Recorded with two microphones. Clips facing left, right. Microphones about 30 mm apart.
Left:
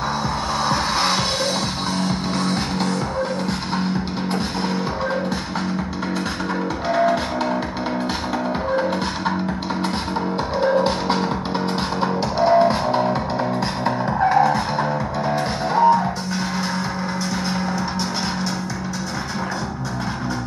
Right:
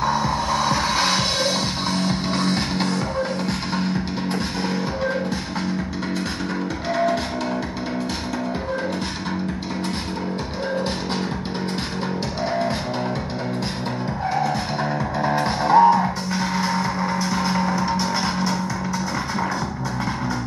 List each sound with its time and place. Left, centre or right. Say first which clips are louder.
0.6 s music: left 2 dB; left
2.0 s music: even; centre
6.9 s music: left 3 dB; centre
12.4 s music: left 9 dB; left
14.3 s music: left 5 dB; centre
14.8 s music: left 1 dB; centre